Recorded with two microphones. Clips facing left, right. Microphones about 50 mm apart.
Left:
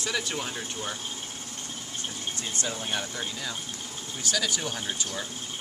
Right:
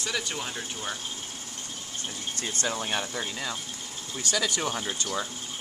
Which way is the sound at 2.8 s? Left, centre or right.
Right.